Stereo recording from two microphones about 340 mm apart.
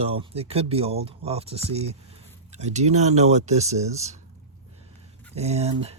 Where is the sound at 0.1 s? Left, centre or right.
Centre.